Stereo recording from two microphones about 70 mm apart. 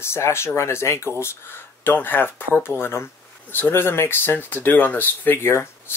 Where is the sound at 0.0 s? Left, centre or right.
Left.